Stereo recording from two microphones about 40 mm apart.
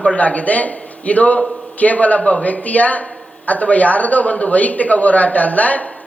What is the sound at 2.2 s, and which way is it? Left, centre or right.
Speech, left.